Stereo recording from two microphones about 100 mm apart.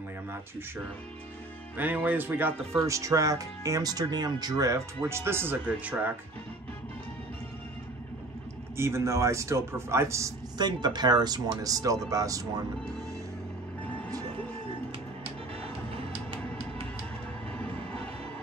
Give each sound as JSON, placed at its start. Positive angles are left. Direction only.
{"t": 1.8, "sound": "a man's voice", "side_deg": -15}
{"t": 2.8, "sound": "speech", "side_deg": -35}
{"t": 8.7, "sound": "a man's voice", "side_deg": -25}
{"t": 10.6, "sound": "speech", "side_deg": -45}